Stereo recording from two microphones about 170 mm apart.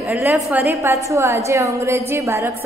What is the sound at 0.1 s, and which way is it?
A woman's voice, 10° right (ahead or behind).